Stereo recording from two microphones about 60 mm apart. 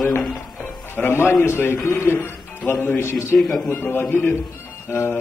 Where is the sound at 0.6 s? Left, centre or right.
Left.